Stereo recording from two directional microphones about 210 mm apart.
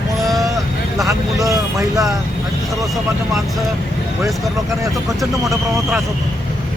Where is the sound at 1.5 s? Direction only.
15° right (ahead or behind).